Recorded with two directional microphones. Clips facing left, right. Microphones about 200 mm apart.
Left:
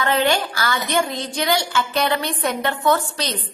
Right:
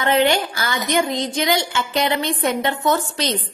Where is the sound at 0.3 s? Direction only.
25° right (ahead or behind).